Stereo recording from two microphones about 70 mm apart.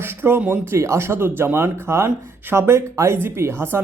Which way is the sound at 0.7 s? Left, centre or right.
Right.